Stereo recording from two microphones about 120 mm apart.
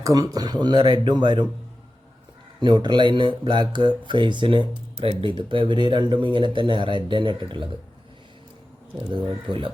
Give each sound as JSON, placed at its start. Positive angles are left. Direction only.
{"t": 0.0, "sound": "speech", "side_deg": -30}
{"t": 2.6, "sound": "speech", "side_deg": -40}